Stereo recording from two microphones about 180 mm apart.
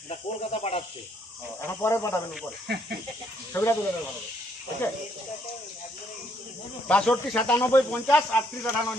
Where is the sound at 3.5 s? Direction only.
15° left (ahead or behind).